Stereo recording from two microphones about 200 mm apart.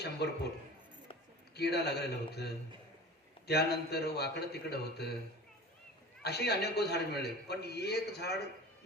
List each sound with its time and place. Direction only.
0.0 s a man's voice: 55° left (ahead or behind)
1.5 s a man's voice: 55° left (ahead or behind)
6.2 s a man's voice: 55° left (ahead or behind)